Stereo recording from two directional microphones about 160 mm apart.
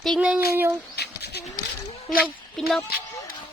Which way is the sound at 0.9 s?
90° left.